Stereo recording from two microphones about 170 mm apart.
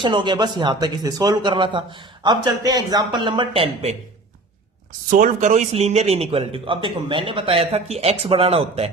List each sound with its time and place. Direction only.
0.0 s speech: 25° right (ahead or behind)
5.0 s a man's voice: 50° right (ahead or behind); by 8.9 s 35° right (ahead or behind)